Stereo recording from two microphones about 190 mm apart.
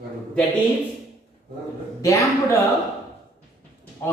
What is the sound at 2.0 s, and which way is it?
Speech, 15° left (ahead or behind).